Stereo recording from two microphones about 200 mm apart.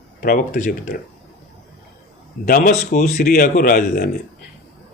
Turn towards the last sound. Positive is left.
turn(degrees=45)  # may be behind; listen again after turning